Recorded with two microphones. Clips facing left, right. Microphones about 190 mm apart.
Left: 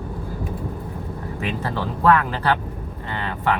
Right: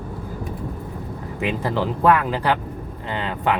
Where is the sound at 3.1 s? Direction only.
15° right (ahead or behind).